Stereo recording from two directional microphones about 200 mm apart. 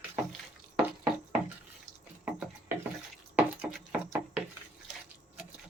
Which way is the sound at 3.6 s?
10° right (ahead or behind).